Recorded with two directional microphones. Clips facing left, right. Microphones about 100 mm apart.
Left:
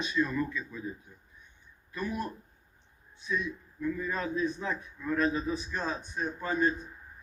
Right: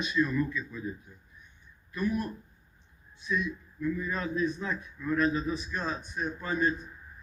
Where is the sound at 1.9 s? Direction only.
35° left (ahead or behind).